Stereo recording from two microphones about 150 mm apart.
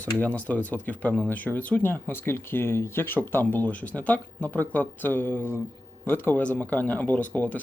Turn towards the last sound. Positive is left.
turn(degrees=10)  # may be behind; listen again after turning